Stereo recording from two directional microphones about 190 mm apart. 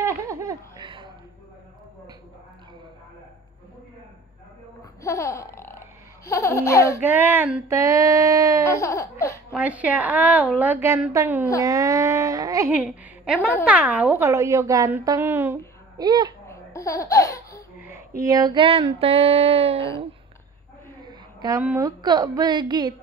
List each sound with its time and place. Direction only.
0.0 s laughter: 15° right (ahead or behind)
5.0 s burping: 15° left (ahead or behind)
7.0 s a woman's voice: 10° right (ahead or behind)
8.6 s burping: 15° left (ahead or behind)
9.5 s a woman's voice: 10° right (ahead or behind)
16.4 s laughter: 15° left (ahead or behind)
17.8 s female singing: 15° right (ahead or behind); by 19.9 s 30° right (ahead or behind)
21.0 s a sound: 20° right (ahead or behind)
21.6 s female singing: 15° right (ahead or behind)